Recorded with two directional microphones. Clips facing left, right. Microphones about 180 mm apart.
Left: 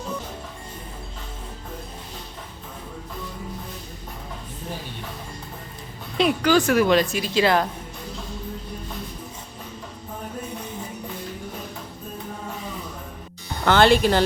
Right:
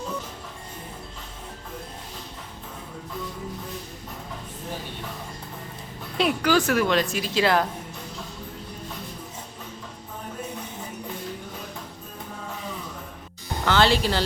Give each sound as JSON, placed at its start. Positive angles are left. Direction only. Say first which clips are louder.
{"t": 6.1, "sound": "speech", "louder": "left 3 dB", "side_deg": -5}
{"t": 13.7, "sound": "speech", "louder": "left 5 dB", "side_deg": 55}